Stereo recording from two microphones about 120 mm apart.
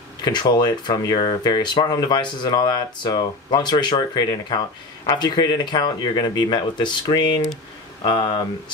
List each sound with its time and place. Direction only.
0.2 s speech: 35° left (ahead or behind)